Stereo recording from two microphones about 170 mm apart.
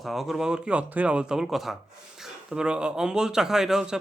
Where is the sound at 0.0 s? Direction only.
Centre (ahead or behind).